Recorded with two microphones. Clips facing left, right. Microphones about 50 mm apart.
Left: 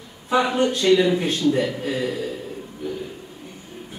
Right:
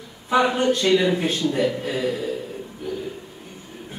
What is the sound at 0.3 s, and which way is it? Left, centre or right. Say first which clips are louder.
A man's voice: right 1 dB; centre.